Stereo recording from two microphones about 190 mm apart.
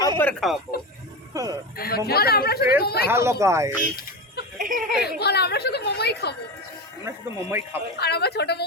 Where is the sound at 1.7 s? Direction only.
50° left (ahead or behind).